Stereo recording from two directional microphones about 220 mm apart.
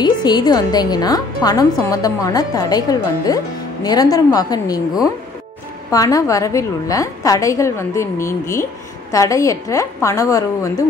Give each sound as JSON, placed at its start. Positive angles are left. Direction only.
{"t": 0.0, "sound": "a woman's voice", "side_deg": 20}
{"t": 5.9, "sound": "a woman's voice", "side_deg": 15}